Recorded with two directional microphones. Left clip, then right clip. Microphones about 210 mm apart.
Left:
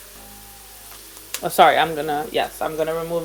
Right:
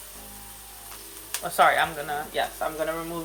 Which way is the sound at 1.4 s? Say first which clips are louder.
Left 6 dB; 40° left (ahead or behind).